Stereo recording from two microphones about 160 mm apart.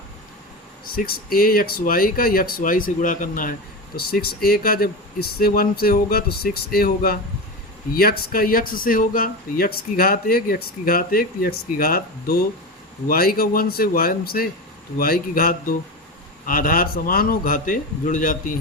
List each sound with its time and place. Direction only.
0.9 s speech: 70° left (ahead or behind)
3.9 s speech: 75° left (ahead or behind); by 18.5 s 55° left (ahead or behind)